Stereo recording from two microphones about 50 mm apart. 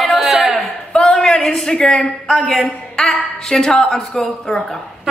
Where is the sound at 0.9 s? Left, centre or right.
Centre.